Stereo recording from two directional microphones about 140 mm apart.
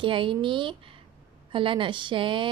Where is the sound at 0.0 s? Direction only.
35° right (ahead or behind).